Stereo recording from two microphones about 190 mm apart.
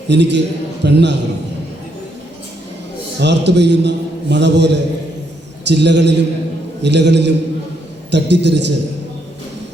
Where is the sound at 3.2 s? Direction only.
65° right (ahead or behind).